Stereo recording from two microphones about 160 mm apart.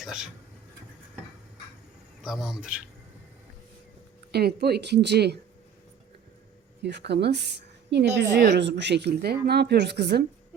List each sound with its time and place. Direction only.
0.0 s speech: 5° right (ahead or behind)
2.2 s a man's voice: centre (ahead or behind)
4.3 s a woman's voice: 85° right
6.8 s a woman's voice: 90° right